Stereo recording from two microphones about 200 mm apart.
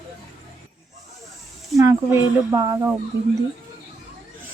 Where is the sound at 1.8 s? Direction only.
15° right (ahead or behind).